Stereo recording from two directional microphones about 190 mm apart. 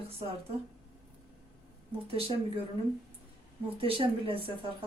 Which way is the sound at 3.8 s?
30° right (ahead or behind).